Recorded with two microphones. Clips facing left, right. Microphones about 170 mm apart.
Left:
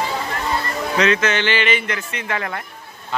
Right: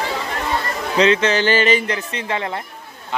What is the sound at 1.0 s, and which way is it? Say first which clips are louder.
Speech: right 3 dB; 30° right (ahead or behind).